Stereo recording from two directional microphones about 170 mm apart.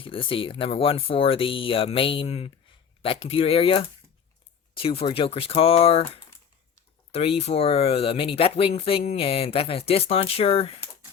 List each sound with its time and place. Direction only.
0.0 s speech: 30° left (ahead or behind)
7.1 s speech: 35° left (ahead or behind)